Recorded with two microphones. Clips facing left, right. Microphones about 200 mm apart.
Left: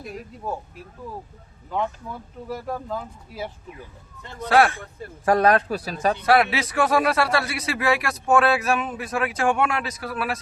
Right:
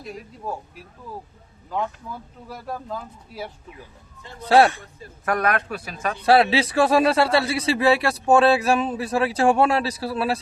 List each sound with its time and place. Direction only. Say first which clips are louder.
2.5 s speech: left 3 dB; centre (ahead or behind)
4.4 s a man's voice: right 2 dB; 25° right (ahead or behind)
5.2 s a man's voice: left 5 dB; 30° left (ahead or behind)
6.2 s a man's voice: right 5 dB; 30° right (ahead or behind)